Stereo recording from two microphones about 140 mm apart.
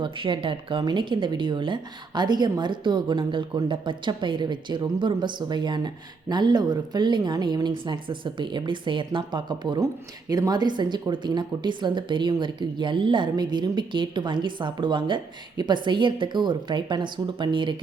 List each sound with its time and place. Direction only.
0.0 s speech: 35° right (ahead or behind)